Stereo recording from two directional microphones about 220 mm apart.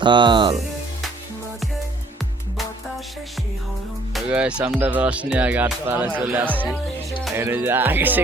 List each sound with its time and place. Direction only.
0.0 s speech: 20° right (ahead or behind)
4.1 s speech: 5° right (ahead or behind)